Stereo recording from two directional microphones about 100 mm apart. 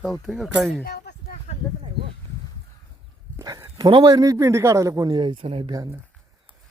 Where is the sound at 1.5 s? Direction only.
90° left.